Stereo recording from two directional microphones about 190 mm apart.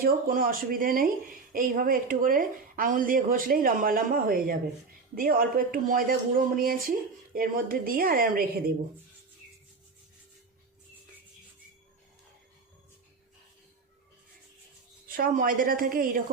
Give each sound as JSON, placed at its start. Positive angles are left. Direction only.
{"t": 0.0, "sound": "speech", "side_deg": -50}
{"t": 15.0, "sound": "speech", "side_deg": -50}